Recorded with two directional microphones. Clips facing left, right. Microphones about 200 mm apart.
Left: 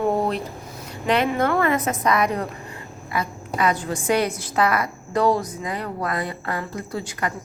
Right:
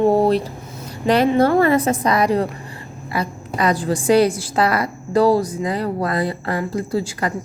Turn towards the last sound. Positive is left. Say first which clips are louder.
# right 6 dB
turn(degrees=-30)  # may be behind; listen again after turning